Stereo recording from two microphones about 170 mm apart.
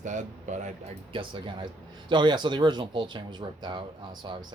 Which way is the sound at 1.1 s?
30° right (ahead or behind).